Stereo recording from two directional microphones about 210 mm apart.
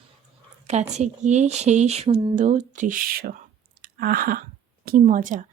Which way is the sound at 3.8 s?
45° right (ahead or behind).